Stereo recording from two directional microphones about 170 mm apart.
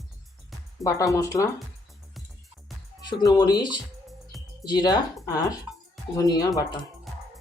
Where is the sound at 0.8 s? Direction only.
20° left (ahead or behind).